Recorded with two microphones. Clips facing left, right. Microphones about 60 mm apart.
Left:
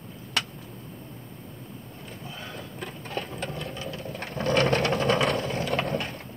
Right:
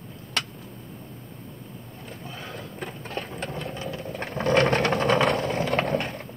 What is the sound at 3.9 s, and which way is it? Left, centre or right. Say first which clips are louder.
Vehicle: right 2 dB; right.